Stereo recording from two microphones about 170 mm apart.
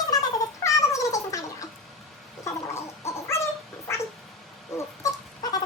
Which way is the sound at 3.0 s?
15° left (ahead or behind).